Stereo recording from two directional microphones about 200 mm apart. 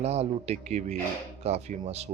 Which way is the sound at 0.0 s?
30° right (ahead or behind).